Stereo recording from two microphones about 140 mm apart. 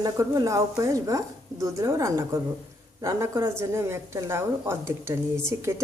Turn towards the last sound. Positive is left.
turn(degrees=-20)  # may be behind; listen again after turning